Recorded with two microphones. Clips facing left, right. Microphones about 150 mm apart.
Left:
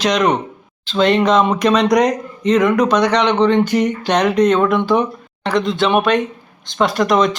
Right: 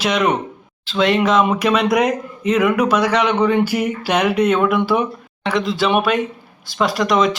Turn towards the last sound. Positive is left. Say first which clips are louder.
# left 2 dB
turn(degrees=0)  # may be behind; listen again after turning